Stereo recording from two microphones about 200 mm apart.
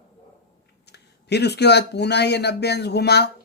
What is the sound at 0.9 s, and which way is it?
Speech, 55° left (ahead or behind).